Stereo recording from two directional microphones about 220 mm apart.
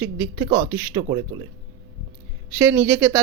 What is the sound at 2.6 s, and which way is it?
Speech, 10° right (ahead or behind).